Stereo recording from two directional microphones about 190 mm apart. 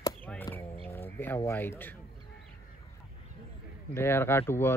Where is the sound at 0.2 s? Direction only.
10° left (ahead or behind).